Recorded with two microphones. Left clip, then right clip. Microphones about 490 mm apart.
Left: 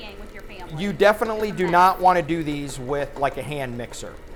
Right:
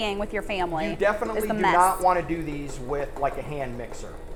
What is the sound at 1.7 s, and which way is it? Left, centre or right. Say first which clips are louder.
Speech: left 5 dB; left.